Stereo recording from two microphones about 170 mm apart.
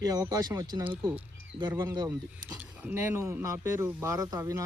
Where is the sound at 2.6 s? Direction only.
10° right (ahead or behind).